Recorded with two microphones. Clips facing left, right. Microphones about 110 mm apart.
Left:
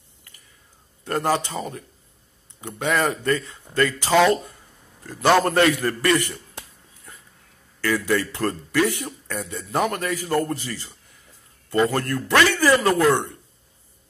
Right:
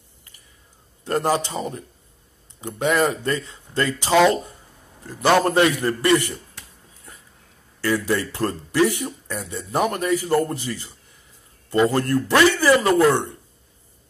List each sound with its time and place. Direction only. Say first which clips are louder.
1.0 s speech: right 1 dB; 20° right (ahead or behind)
5.4 s speech: right 1 dB; 20° right (ahead or behind)
7.8 s a man's voice: even; 25° right (ahead or behind)